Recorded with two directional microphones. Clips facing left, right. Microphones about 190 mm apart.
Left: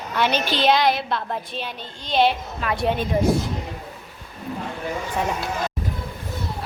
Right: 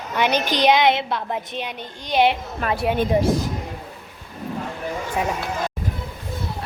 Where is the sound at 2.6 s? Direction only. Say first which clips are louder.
Right 2 dB; 50° right (ahead or behind).